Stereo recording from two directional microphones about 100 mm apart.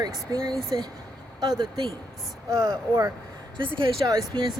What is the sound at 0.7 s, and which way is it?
A woman's voice, 45° right (ahead or behind).